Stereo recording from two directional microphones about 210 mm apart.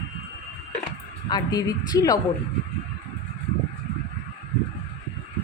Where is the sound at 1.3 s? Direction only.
20° left (ahead or behind).